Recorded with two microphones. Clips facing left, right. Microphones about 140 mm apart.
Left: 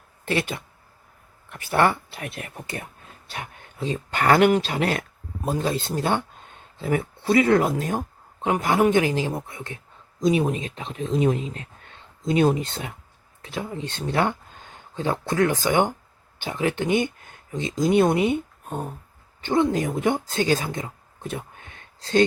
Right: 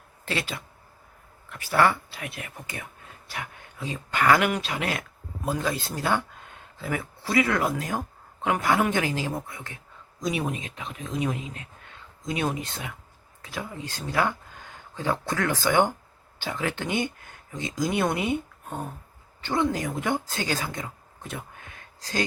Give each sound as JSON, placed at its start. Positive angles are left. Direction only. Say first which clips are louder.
{"t": 0.3, "sound": "speech", "louder": "left 5 dB", "side_deg": 20}
{"t": 1.7, "sound": "speech", "louder": "left 1 dB", "side_deg": 25}